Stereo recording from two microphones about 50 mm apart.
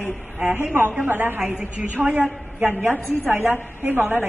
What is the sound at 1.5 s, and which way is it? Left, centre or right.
Speech, centre.